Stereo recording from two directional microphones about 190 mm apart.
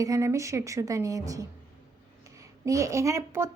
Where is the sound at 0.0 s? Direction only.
15° right (ahead or behind).